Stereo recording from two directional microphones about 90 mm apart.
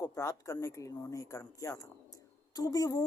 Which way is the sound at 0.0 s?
40° left (ahead or behind).